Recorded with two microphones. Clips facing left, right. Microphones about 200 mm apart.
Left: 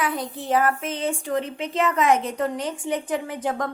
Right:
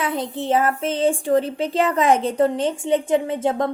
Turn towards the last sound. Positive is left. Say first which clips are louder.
# right 6 dB
turn(degrees=-25)  # may be behind; listen again after turning